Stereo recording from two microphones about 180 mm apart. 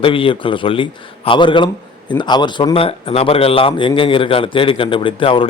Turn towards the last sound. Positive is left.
turn(degrees=30)  # may be behind; listen again after turning